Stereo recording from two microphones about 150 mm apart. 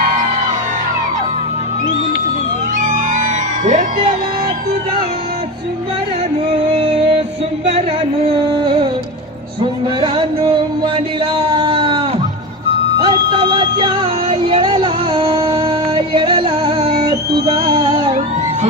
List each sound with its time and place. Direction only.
2.7 s music: 55° right (ahead or behind)
6.5 s music: 45° right (ahead or behind)
8.2 s music: 40° right (ahead or behind)
10.0 s music: 30° right (ahead or behind)
11.4 s a sound: 35° right (ahead or behind)
13.0 s music: 35° right (ahead or behind)
17.4 s a sound: 40° right (ahead or behind)